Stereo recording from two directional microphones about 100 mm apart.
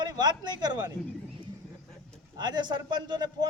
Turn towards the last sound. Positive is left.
turn(degrees=-45)  # may be behind; listen again after turning